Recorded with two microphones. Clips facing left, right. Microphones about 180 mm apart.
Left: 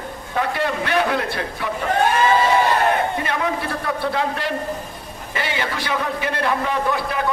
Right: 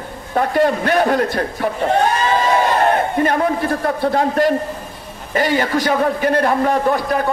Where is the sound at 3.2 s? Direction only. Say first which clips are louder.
Right 7 dB; 45° right (ahead or behind).